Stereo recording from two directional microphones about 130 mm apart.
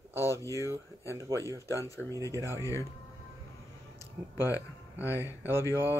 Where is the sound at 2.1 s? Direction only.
25° right (ahead or behind).